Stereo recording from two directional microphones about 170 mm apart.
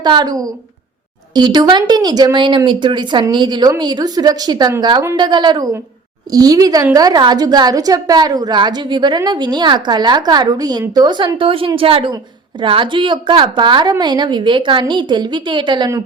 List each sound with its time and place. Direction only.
0.0 s a woman's voice: 25° right (ahead or behind)